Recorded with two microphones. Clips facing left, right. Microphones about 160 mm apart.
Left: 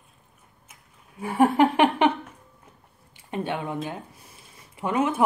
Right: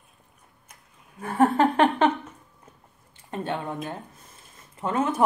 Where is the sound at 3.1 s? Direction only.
15° left (ahead or behind).